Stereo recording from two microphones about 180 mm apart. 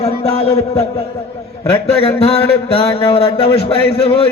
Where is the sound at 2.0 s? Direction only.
35° left (ahead or behind).